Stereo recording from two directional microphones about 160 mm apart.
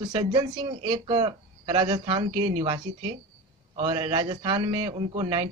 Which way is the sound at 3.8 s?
40° right (ahead or behind).